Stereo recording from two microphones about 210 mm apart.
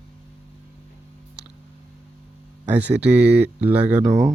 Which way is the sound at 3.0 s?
5° right (ahead or behind).